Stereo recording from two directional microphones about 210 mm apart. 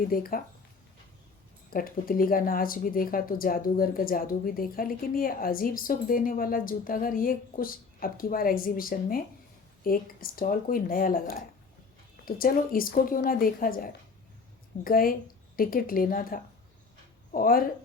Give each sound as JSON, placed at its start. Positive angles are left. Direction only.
{"t": 0.1, "sound": "speech", "side_deg": 45}
{"t": 1.7, "sound": "speech", "side_deg": 45}